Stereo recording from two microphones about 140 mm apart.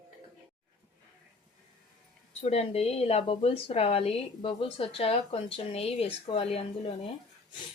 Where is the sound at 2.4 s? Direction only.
50° left (ahead or behind).